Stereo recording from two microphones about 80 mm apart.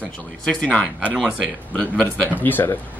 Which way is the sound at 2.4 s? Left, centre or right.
Left.